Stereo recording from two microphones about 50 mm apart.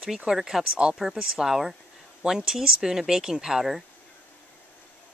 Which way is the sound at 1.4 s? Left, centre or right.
Centre.